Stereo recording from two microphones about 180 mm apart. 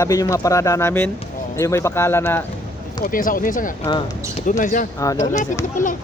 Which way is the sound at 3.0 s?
50° left (ahead or behind).